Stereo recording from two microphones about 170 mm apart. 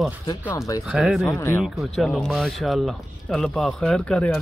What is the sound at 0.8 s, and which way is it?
Speech, 5° right (ahead or behind).